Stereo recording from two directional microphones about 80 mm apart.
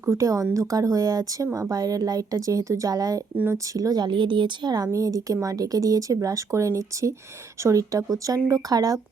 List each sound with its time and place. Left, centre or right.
0.0 s speech: right
0.5 s speech: right
4.0 s speech: right
4.9 s speech: right